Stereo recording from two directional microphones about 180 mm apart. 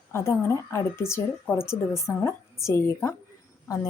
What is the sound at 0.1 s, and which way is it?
A woman's voice, 15° left (ahead or behind).